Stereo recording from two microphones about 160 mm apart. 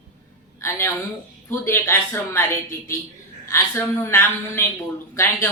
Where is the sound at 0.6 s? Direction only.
15° left (ahead or behind).